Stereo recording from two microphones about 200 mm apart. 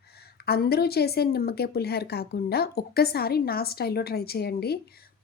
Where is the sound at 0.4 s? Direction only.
50° left (ahead or behind).